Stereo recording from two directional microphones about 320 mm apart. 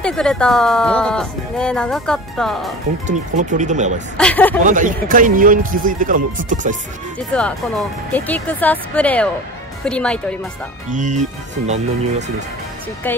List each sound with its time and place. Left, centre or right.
0.0 s speech: centre
3.1 s speech: right
4.2 s speech: centre
4.6 s speech: right
8.1 s speech: centre
10.9 s speech: right